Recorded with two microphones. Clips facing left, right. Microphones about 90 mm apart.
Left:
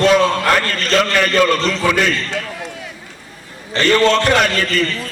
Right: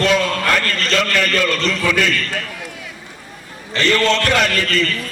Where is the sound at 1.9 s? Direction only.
45° left (ahead or behind).